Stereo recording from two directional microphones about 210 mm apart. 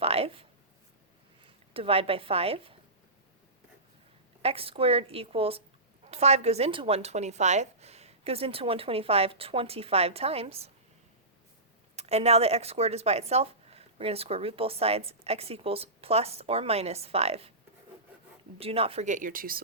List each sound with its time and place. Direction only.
0.0 s speech: 30° right (ahead or behind)
1.7 s speech: 25° right (ahead or behind)
4.4 s speech: 25° right (ahead or behind)
11.9 s speech: 30° right (ahead or behind)
18.6 s speech: 30° right (ahead or behind); by 19.6 s 45° right (ahead or behind)